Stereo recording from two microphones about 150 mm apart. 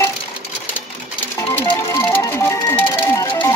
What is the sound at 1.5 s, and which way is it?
Music, 15° left (ahead or behind).